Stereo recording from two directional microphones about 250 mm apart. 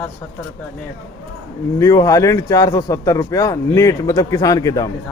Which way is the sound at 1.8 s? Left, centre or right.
Centre.